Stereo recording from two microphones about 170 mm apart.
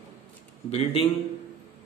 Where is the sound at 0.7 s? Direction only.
35° left (ahead or behind).